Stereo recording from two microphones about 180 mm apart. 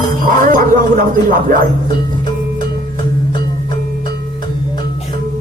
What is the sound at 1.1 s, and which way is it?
Speech, 50° right (ahead or behind).